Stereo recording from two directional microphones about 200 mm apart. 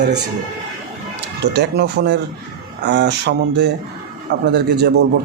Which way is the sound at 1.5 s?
55° right (ahead or behind).